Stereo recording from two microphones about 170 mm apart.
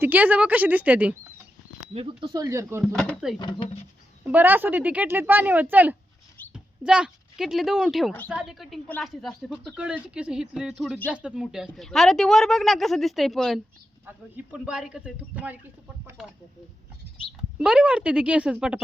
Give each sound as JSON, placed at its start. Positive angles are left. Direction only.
{"t": 0.0, "sound": "speech", "side_deg": -10}
{"t": 1.9, "sound": "speech", "side_deg": -35}
{"t": 2.8, "sound": "a woman's voice", "side_deg": 5}
{"t": 3.3, "sound": "speech", "side_deg": 25}
{"t": 4.3, "sound": "a woman's voice", "side_deg": -10}
{"t": 17.6, "sound": "a woman's voice", "side_deg": -5}